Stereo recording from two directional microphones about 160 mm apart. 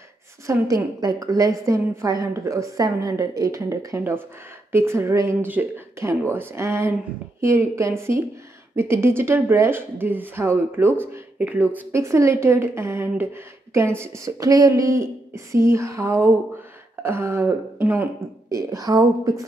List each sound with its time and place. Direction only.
0.5 s a woman's voice: 20° right (ahead or behind)